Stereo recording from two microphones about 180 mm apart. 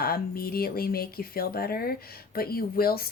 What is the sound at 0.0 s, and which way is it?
Speech, 55° left (ahead or behind).